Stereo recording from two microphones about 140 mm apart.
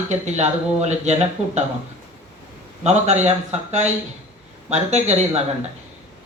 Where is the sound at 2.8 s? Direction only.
55° right (ahead or behind).